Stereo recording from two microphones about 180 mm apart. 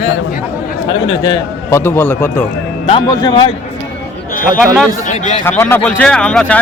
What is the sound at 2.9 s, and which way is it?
Speech, 25° left (ahead or behind).